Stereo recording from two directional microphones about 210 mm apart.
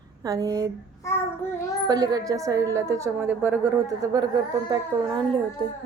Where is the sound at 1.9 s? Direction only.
15° right (ahead or behind).